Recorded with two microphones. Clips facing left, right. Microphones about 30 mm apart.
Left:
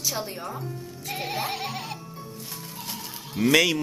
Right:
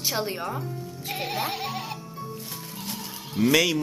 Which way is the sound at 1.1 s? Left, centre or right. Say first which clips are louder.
Even; centre.